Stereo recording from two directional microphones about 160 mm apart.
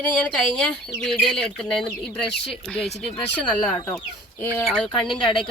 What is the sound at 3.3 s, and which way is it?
Speech, 5° left (ahead or behind).